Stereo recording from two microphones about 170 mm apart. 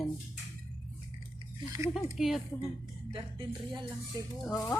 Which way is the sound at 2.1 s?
Centre (ahead or behind).